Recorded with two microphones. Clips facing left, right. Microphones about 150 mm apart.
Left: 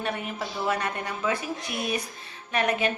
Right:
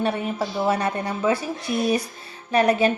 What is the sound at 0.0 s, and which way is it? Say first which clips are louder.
A woman's voice: right 7 dB; 30° right (ahead or behind).